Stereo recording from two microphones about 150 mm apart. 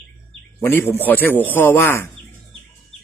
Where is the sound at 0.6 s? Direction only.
15° left (ahead or behind).